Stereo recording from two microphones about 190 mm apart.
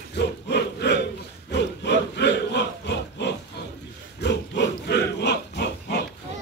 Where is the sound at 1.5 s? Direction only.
65° left (ahead or behind).